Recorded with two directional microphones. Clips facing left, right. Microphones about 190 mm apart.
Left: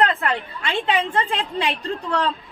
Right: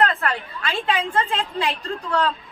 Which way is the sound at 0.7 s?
15° left (ahead or behind).